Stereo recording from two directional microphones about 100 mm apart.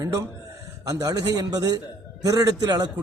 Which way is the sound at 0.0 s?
35° right (ahead or behind).